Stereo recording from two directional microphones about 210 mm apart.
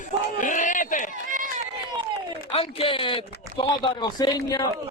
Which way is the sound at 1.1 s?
40° right (ahead or behind).